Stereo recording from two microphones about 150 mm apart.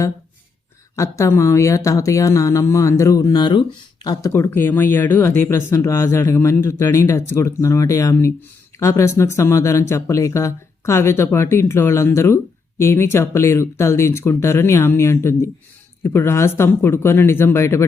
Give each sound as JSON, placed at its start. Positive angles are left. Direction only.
{"t": 0.9, "sound": "speech", "side_deg": 20}
{"t": 4.3, "sound": "speech", "side_deg": 15}